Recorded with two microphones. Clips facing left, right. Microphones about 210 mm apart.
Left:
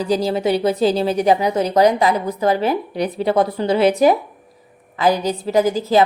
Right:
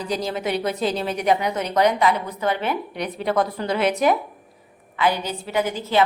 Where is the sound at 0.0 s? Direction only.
30° left (ahead or behind).